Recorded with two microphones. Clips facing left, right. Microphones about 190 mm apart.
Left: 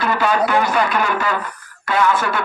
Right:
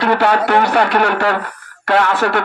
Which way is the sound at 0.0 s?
65° right (ahead or behind).